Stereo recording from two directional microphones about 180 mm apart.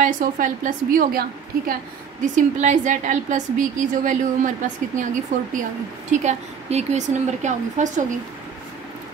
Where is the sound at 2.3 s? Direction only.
45° right (ahead or behind).